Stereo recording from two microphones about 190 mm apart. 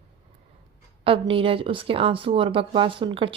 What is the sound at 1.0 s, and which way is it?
A woman's voice, 30° right (ahead or behind).